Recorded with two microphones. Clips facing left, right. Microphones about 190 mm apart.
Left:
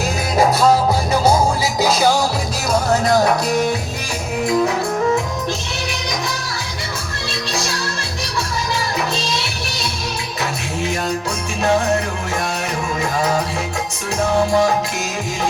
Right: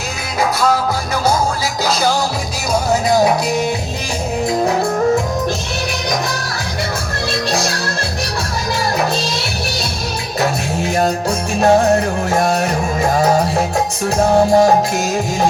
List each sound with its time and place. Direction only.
0.3 s music: 35° left (ahead or behind)
1.8 s music: 15° left (ahead or behind)
4.4 s music: 40° right (ahead or behind)
7.5 s music: 45° right (ahead or behind)
8.8 s music: 45° right (ahead or behind)